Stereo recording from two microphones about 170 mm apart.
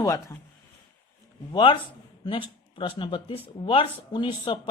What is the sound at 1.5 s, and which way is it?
Speech, 30° left (ahead or behind).